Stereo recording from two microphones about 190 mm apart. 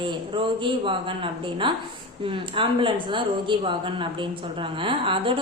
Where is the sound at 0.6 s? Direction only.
25° right (ahead or behind).